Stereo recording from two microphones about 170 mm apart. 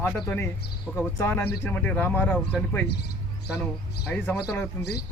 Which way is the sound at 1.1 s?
15° left (ahead or behind).